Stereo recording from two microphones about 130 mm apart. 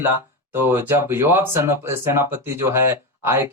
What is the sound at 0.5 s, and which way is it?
Speech, 15° right (ahead or behind).